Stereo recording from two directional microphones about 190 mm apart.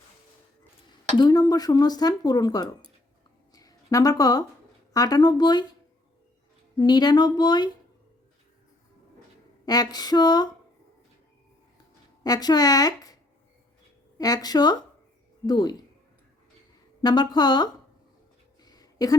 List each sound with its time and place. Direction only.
1.1 s dishes: 20° left (ahead or behind)
3.5 s a sound: 20° left (ahead or behind)
4.9 s dishes: 20° left (ahead or behind)
6.7 s dishes: 20° left (ahead or behind)
9.6 s dishes: 20° left (ahead or behind)
12.2 s dishes: 20° left (ahead or behind)
14.2 s dishes: 20° left (ahead or behind)
17.0 s dishes: 20° left (ahead or behind)
18.6 s a sound: 20° left (ahead or behind)